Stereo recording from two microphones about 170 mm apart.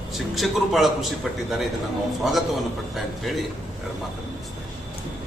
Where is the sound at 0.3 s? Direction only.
Centre (ahead or behind).